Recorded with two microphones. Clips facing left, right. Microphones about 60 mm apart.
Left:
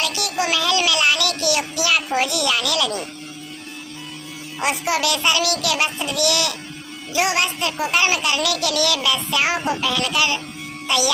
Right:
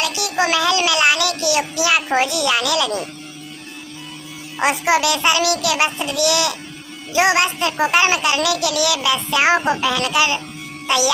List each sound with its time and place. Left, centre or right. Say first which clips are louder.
0.0 s child singing: right 3 dB; right
2.1 s a child's voice: right 3 dB; right
4.6 s a child's voice: right 4 dB; right
8.4 s a sound: right 2 dB; centre
9.6 s a child's voice: right 3 dB; right